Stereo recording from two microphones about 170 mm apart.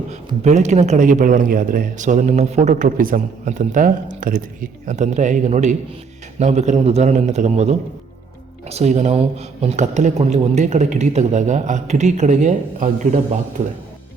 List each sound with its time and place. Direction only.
0.1 s a man's voice: 40° right (ahead or behind)